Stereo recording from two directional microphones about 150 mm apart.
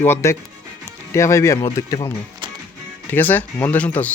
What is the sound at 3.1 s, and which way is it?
Speech, 10° left (ahead or behind).